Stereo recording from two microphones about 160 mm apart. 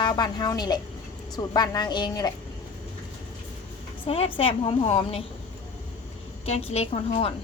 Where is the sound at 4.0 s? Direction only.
35° left (ahead or behind).